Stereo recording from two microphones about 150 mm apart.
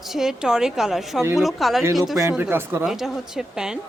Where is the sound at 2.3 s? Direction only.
10° right (ahead or behind).